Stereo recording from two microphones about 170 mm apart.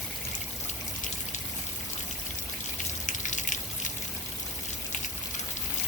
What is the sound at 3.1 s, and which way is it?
Drip, 45° left (ahead or behind).